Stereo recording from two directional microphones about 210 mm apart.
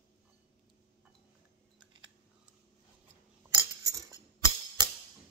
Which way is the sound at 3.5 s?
15° right (ahead or behind).